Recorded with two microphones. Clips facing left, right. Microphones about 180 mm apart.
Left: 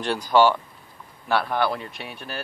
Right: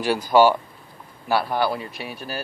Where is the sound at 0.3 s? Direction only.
10° right (ahead or behind).